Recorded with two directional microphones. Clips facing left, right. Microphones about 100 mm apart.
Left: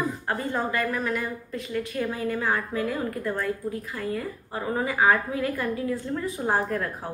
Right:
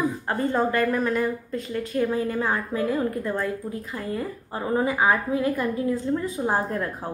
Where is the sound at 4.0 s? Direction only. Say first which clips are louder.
Right 1 dB; 30° right (ahead or behind).